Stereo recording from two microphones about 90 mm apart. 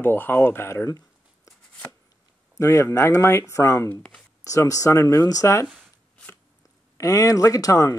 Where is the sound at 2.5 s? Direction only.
35° left (ahead or behind).